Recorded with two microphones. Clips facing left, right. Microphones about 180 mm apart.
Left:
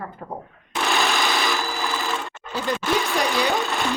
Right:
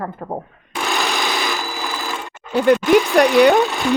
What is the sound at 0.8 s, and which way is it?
Sewing machine, centre (ahead or behind).